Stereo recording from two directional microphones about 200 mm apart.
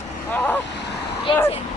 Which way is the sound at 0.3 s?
10° left (ahead or behind).